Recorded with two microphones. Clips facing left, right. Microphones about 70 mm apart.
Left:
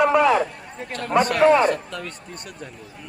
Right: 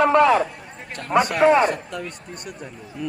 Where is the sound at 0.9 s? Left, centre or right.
Centre.